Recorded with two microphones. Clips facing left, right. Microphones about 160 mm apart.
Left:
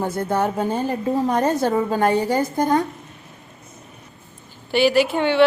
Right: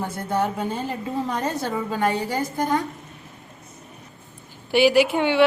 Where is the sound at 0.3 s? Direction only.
45° left (ahead or behind).